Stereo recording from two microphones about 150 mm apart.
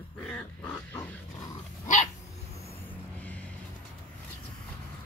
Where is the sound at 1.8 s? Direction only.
55° left (ahead or behind).